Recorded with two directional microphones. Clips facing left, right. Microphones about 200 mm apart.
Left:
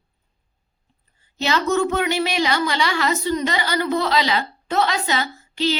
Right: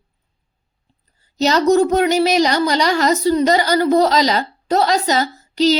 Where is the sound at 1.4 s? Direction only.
40° right (ahead or behind).